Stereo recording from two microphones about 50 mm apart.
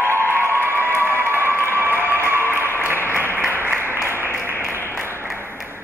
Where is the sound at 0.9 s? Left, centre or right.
Right.